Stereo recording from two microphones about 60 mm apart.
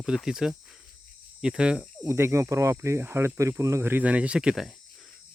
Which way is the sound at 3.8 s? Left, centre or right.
Right.